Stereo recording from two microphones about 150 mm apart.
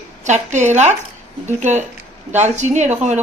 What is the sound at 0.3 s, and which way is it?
A woman's voice, 50° right (ahead or behind).